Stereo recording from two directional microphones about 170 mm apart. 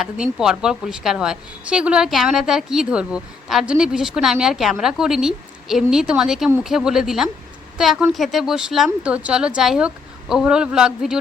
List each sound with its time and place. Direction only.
0.0 s a woman's voice: 5° right (ahead or behind)